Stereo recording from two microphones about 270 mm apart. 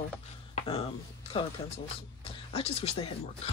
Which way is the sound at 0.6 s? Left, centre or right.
Left.